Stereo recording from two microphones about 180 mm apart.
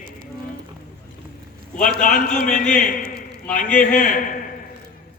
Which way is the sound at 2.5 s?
45° left (ahead or behind).